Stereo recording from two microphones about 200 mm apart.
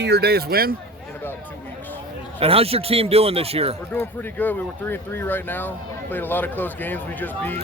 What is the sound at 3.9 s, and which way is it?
Speech, 10° left (ahead or behind).